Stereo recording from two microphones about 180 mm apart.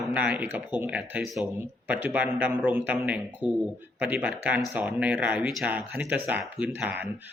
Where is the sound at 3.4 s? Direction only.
25° left (ahead or behind).